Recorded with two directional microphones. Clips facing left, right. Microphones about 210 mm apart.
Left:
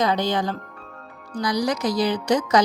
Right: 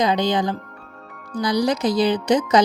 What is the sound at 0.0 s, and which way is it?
Speech, 15° right (ahead or behind).